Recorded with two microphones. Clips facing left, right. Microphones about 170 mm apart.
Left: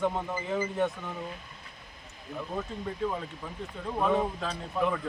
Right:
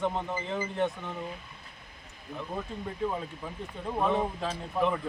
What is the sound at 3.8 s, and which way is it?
Speech, 15° right (ahead or behind).